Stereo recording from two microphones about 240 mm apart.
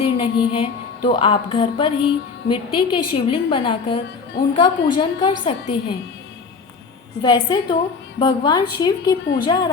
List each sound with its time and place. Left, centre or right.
0.0 s music: left
7.2 s music: centre
8.2 s a woman's voice: centre